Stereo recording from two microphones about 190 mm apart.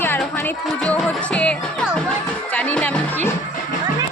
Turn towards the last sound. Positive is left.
turn(degrees=10)  # may be behind; listen again after turning